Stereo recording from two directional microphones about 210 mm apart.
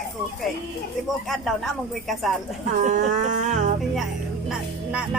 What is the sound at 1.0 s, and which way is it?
Speech, centre (ahead or behind).